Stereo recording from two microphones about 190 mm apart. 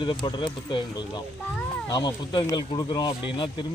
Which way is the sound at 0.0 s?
25° left (ahead or behind).